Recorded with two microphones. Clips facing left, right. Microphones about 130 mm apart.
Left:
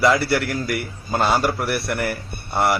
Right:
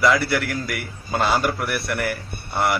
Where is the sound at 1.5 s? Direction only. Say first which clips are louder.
Left 2 dB; 30° left (ahead or behind).